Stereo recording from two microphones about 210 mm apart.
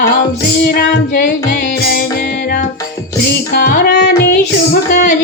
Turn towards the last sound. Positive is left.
turn(degrees=50)  # may be behind; listen again after turning